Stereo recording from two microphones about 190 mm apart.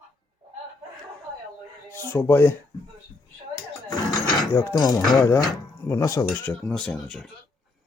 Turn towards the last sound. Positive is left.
turn(degrees=0)  # may be behind; listen again after turning